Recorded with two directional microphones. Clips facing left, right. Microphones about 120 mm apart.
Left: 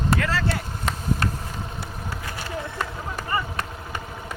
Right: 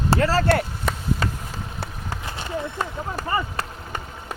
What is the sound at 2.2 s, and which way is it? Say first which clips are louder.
Run: right 4 dB; 25° right (ahead or behind).